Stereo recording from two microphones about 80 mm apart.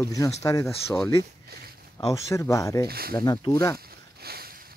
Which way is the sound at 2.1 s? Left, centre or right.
Left.